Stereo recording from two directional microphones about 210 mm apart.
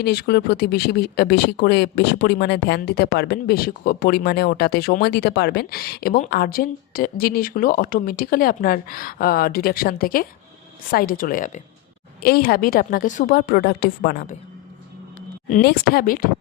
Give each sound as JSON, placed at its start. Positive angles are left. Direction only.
{"t": 0.0, "sound": "a woman's voice", "side_deg": 50}
{"t": 15.4, "sound": "speech", "side_deg": 40}